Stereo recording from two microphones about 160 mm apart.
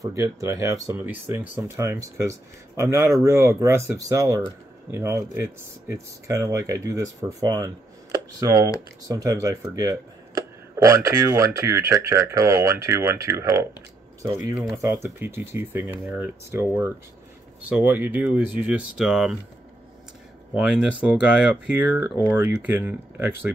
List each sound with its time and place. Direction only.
0.0 s speech: 20° right (ahead or behind)
14.8 s speech: 20° right (ahead or behind)
20.5 s speech: 5° right (ahead or behind)